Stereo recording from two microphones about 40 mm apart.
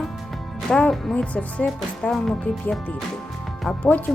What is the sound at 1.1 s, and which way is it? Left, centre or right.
Speech, left.